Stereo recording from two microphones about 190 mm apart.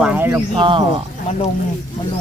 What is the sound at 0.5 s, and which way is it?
Speech, 25° right (ahead or behind).